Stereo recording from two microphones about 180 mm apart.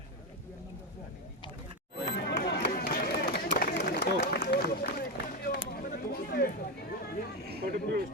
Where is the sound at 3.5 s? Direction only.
60° left (ahead or behind).